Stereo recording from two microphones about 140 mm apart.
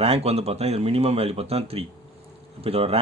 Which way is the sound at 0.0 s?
45° right (ahead or behind).